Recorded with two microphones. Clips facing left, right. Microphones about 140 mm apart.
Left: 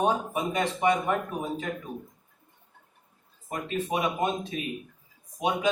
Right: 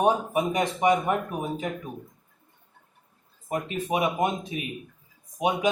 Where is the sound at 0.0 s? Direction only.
15° right (ahead or behind).